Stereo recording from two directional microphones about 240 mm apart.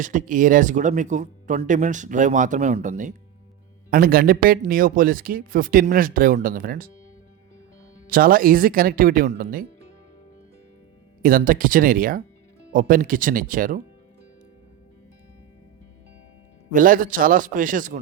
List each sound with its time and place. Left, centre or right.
0.0 s speech: right
8.0 s speech: right
11.2 s speech: right
16.7 s speech: right